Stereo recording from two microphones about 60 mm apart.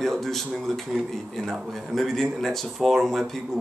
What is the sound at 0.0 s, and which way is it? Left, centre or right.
Speech, centre.